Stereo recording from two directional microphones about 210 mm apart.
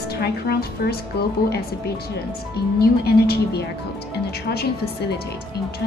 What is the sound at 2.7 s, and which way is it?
A woman's voice, 50° left (ahead or behind).